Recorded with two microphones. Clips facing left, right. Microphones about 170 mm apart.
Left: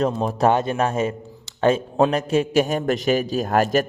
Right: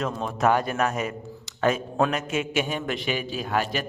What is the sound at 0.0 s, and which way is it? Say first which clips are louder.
A man's voice: left 5 dB; 35° left (ahead or behind).